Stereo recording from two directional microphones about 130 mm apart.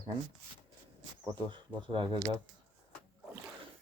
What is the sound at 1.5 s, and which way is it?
Speech, 40° right (ahead or behind).